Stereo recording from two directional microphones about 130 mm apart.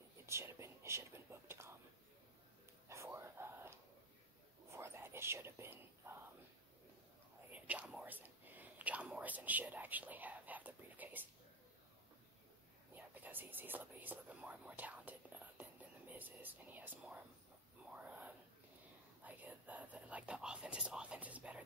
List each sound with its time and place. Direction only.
0.3 s speech: 20° right (ahead or behind)
2.9 s a sound: 20° right (ahead or behind)
4.6 s speech: 20° right (ahead or behind)
7.5 s whispering: 10° right (ahead or behind)
12.9 s speech: 15° right (ahead or behind)
17.9 s whispering: 10° right (ahead or behind)